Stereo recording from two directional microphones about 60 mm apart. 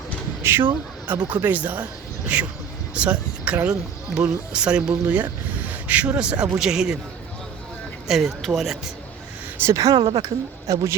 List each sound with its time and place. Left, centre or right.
0.4 s a man's voice: right; by 7.0 s centre
8.0 s speech: centre
9.7 s speech: right